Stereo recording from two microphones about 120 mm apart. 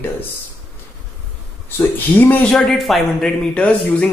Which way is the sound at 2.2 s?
15° left (ahead or behind).